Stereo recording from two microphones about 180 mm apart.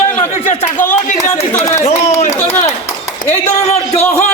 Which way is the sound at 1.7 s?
40° left (ahead or behind).